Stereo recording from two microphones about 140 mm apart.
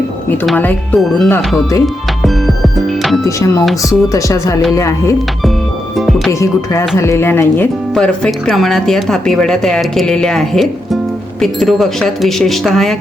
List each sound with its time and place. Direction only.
0.4 s speech: 10° left (ahead or behind)
2.7 s music: centre (ahead or behind)
3.2 s speech: 20° left (ahead or behind)
6.4 s speech: 20° left (ahead or behind); by 13.0 s centre (ahead or behind)